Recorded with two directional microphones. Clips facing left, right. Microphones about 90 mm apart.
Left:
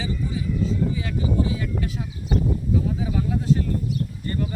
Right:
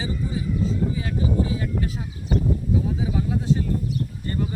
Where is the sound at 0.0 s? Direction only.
30° right (ahead or behind).